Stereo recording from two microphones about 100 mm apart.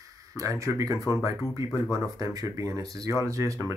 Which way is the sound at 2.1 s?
35° right (ahead or behind).